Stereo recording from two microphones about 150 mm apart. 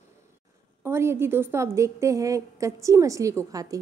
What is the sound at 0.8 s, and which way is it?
A woman's voice, 15° right (ahead or behind).